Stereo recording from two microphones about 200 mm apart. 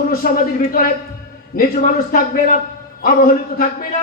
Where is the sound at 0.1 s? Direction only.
45° left (ahead or behind).